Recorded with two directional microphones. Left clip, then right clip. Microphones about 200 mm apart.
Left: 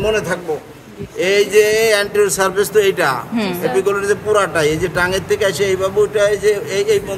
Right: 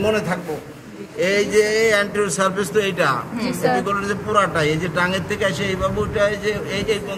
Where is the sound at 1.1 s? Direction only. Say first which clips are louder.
Left 4 dB; 60° left (ahead or behind).